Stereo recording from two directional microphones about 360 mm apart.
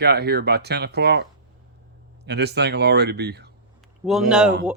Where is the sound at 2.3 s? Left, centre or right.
Right.